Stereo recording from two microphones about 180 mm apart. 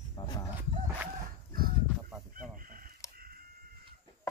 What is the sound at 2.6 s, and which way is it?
Chicken, 50° right (ahead or behind).